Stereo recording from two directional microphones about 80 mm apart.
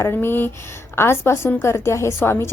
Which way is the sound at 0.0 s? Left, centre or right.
Left.